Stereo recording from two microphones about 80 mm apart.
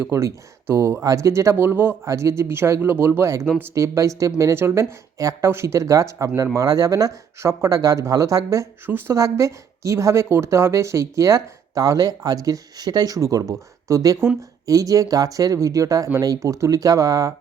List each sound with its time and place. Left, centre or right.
0.0 s speech: right
2.0 s speech: right
8.9 s speech: right
9.1 s a woman's voice: right